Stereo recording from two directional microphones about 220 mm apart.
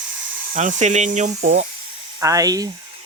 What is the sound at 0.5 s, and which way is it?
Speech, 35° right (ahead or behind).